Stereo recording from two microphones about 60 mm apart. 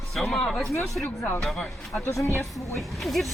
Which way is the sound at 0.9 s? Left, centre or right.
Centre.